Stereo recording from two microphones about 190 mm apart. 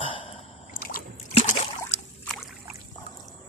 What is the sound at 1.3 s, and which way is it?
Boat, 35° left (ahead or behind).